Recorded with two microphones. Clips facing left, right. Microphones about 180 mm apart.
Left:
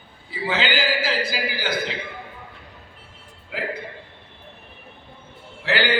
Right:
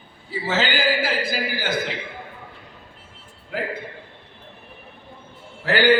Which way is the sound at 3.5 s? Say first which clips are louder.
Right 2 dB; 45° right (ahead or behind).